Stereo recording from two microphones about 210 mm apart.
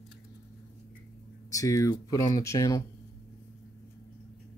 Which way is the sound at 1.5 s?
15° left (ahead or behind).